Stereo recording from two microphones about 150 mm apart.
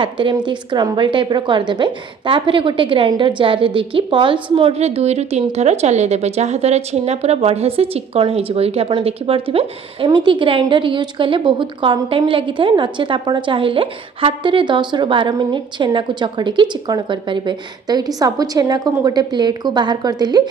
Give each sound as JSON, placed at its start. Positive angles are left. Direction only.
{"t": 0.0, "sound": "a woman's voice", "side_deg": -35}